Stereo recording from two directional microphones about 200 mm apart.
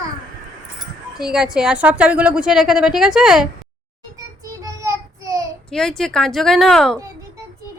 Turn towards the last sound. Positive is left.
turn(degrees=0)  # may be behind; listen again after turning